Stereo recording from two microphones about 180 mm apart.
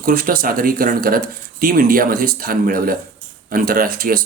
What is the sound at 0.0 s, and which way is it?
Speech, 55° right (ahead or behind).